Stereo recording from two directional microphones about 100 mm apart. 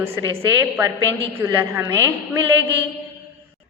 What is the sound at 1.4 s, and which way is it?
Speech, 25° right (ahead or behind).